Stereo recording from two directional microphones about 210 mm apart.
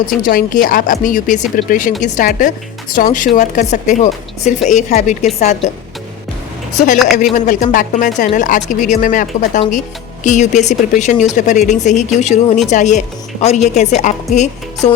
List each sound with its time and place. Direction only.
0.2 s speech: 40° left (ahead or behind)
6.7 s speech: 35° left (ahead or behind)